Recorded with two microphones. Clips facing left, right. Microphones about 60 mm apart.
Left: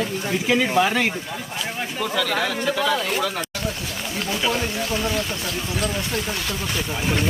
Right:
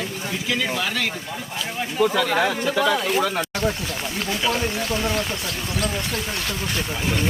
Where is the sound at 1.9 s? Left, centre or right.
Centre.